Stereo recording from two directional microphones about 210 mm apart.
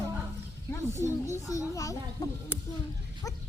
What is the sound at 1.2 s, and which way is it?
A child's voice, 15° left (ahead or behind).